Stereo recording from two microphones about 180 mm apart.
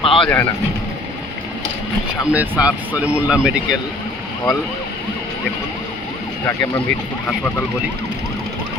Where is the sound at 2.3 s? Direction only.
5° right (ahead or behind).